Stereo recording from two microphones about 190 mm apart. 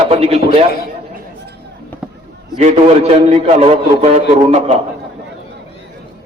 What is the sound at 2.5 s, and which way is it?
A man's voice, 35° right (ahead or behind).